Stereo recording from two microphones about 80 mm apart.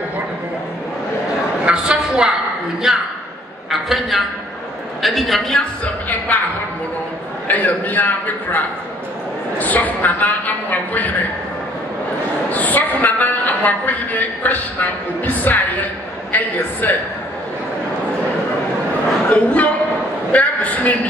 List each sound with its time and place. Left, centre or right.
1.7 s a sound: centre
2.9 s a woman's voice: centre
6.0 s a woman's voice: left
7.4 s a woman's voice: left
12.4 s a woman's voice: left
19.3 s a woman's voice: centre